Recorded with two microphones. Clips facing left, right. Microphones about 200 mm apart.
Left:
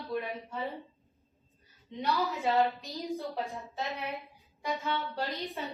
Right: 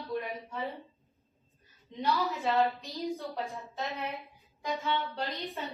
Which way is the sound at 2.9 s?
Centre (ahead or behind).